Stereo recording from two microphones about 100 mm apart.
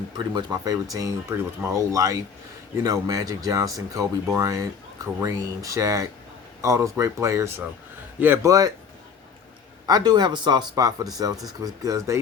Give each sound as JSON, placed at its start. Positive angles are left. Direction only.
{"t": 0.2, "sound": "speech", "side_deg": -50}
{"t": 9.8, "sound": "speech", "side_deg": -40}